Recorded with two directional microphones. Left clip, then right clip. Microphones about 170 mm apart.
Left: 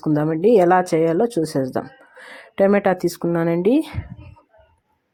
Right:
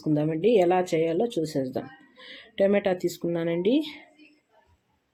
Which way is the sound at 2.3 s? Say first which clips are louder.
Left 6 dB; 35° left (ahead or behind).